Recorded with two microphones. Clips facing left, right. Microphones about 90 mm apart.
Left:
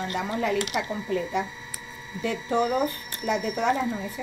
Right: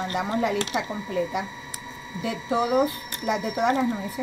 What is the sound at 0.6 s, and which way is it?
Speech, 30° right (ahead or behind).